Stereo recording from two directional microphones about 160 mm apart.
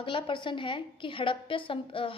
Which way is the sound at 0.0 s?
30° left (ahead or behind).